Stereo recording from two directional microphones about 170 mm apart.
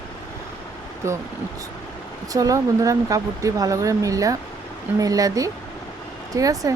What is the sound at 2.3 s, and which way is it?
Speech, 20° right (ahead or behind).